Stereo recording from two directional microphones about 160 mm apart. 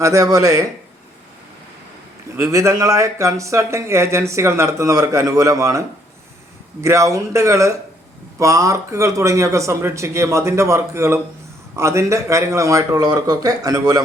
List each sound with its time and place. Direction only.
0.0 s speech: 20° right (ahead or behind)
2.3 s speech: 20° right (ahead or behind)
6.8 s speech: 20° right (ahead or behind)